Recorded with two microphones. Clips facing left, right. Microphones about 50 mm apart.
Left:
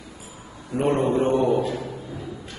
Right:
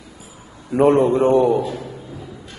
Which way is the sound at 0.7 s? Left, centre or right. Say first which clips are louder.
Right 8 dB; right.